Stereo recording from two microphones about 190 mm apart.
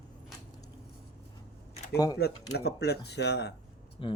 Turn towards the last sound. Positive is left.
turn(degrees=25)  # may be behind; listen again after turning